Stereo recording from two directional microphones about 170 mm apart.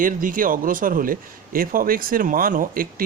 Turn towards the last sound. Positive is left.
turn(degrees=-55)  # may be behind; listen again after turning